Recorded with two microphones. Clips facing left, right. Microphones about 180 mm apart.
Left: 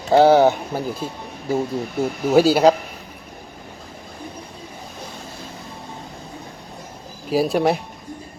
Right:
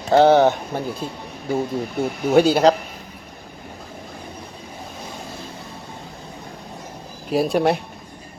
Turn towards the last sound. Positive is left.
turn(degrees=0)  # may be behind; listen again after turning